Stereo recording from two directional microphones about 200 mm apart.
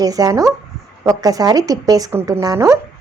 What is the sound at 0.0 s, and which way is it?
A woman's voice, 20° right (ahead or behind).